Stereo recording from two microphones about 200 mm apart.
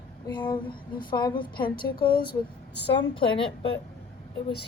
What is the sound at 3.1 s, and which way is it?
Speech, 25° left (ahead or behind).